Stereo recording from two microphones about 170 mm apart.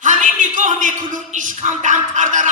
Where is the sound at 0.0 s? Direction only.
50° right (ahead or behind).